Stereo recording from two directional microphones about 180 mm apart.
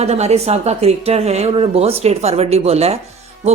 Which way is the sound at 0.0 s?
35° right (ahead or behind).